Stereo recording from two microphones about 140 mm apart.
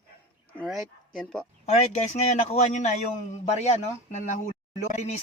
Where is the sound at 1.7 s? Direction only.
55° left (ahead or behind).